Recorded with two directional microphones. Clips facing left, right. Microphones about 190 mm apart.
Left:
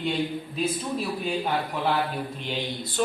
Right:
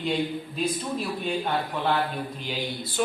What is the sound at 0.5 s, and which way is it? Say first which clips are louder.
Speech: left 1 dB; 5° left (ahead or behind).